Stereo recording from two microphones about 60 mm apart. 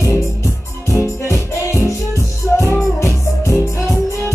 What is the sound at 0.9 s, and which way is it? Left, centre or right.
Music, left.